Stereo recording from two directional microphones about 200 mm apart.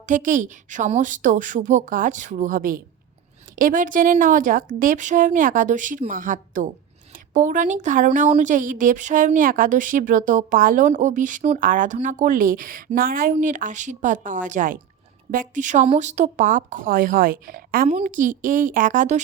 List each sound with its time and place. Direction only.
0.0 s speech: 40° right (ahead or behind)
17.8 s speech: 35° right (ahead or behind)